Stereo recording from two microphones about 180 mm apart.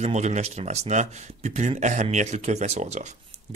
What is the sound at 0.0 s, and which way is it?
A man's voice, 40° right (ahead or behind).